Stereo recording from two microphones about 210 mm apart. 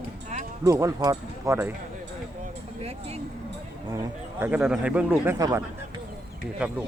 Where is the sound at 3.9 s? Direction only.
10° right (ahead or behind).